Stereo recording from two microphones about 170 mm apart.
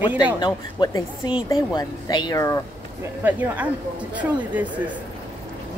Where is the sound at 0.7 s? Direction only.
25° left (ahead or behind).